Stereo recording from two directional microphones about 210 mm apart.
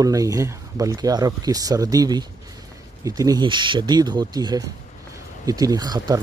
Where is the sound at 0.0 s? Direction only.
15° right (ahead or behind).